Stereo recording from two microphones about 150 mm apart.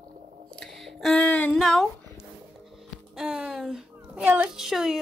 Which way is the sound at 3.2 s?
5° right (ahead or behind).